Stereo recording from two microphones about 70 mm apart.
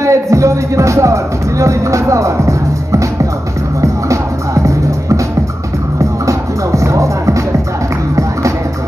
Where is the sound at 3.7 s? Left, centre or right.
Right.